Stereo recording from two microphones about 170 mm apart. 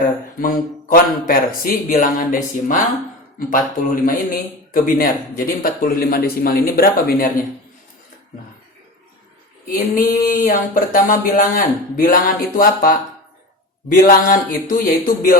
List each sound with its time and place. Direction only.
0.3 s speech: 55° left (ahead or behind)
9.9 s speech: 55° left (ahead or behind)